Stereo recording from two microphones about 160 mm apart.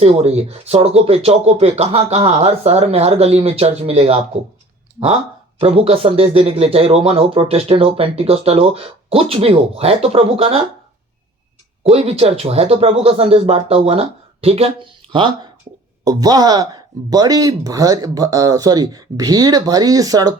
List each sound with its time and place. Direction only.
0.0 s speech: 40° right (ahead or behind)
5.5 s speech: 35° right (ahead or behind)
11.8 s speech: 40° right (ahead or behind); by 20.3 s 20° right (ahead or behind)